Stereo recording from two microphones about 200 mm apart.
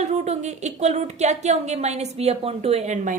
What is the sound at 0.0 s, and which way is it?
A woman's voice, 35° right (ahead or behind).